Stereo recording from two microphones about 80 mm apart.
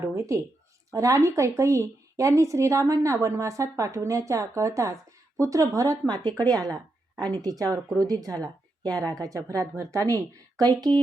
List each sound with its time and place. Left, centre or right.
0.2 s a woman's voice: right
10.2 s speech: right